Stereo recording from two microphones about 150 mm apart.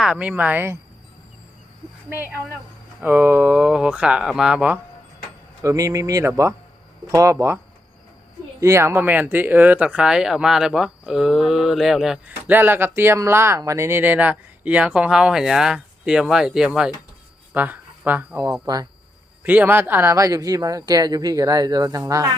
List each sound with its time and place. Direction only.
0.0 s speech: 5° right (ahead or behind)
2.0 s speech: 15° right (ahead or behind)
5.6 s speech: 25° right (ahead or behind)
8.6 s speech: 20° right (ahead or behind); by 12.5 s 5° right (ahead or behind)
12.5 s speech: 15° right (ahead or behind)
18.6 s speech: 25° right (ahead or behind)
19.4 s speech: 10° right (ahead or behind)